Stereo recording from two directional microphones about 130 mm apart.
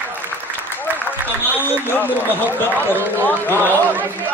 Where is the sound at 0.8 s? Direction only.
15° right (ahead or behind).